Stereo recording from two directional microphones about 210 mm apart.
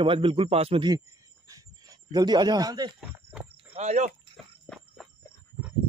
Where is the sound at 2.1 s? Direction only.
20° right (ahead or behind).